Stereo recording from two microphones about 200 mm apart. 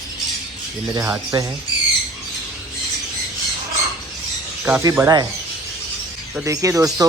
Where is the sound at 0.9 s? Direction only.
15° right (ahead or behind).